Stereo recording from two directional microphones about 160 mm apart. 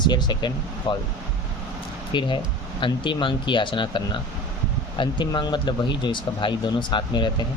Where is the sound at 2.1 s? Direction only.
30° left (ahead or behind).